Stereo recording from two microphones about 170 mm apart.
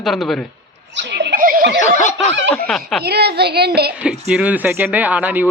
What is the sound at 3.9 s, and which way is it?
Speech, 5° right (ahead or behind).